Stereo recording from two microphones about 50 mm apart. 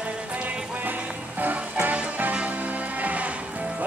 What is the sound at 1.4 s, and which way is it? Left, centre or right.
Music, right.